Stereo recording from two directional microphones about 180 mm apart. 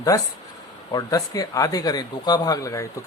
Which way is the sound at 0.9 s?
20° left (ahead or behind).